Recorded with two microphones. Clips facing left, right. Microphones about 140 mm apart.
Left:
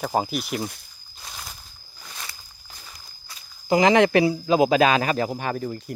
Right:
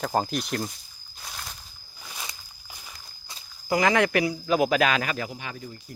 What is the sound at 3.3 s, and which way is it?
Walk, 20° right (ahead or behind).